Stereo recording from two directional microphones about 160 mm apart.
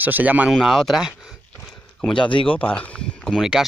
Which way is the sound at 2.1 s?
30° left (ahead or behind).